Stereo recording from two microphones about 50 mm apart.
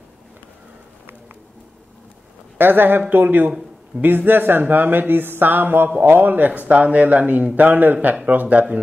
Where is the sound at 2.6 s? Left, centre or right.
Right.